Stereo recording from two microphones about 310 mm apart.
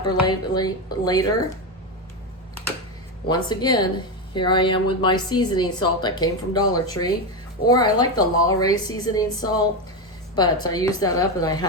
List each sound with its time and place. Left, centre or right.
0.0 s speech: centre
3.2 s speech: centre